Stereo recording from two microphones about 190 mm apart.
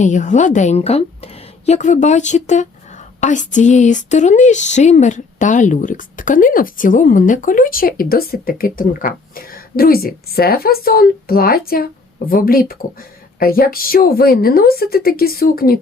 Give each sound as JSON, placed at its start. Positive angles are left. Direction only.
{"t": 0.0, "sound": "a woman's voice", "side_deg": 40}